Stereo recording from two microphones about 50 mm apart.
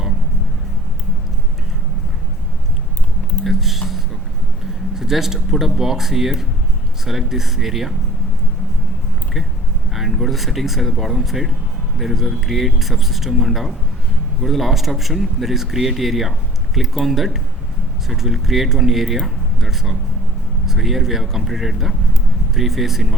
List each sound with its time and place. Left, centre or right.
3.4 s a sound: centre
4.9 s speech: centre
9.9 s speech: centre